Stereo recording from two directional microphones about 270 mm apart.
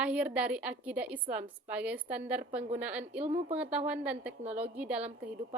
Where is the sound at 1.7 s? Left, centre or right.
Centre.